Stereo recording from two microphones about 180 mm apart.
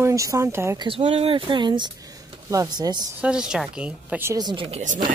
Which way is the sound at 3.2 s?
5° right (ahead or behind).